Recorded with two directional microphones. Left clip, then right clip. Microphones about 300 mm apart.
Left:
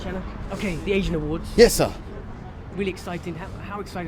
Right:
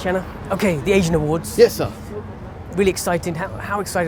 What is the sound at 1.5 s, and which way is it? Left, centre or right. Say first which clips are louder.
Speech: right 1 dB; left.